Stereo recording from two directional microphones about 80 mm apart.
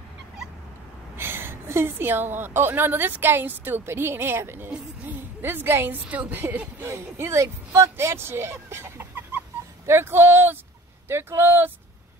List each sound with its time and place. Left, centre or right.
1.1 s a woman's voice: right